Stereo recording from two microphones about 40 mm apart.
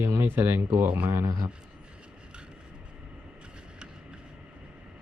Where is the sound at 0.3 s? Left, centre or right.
Right.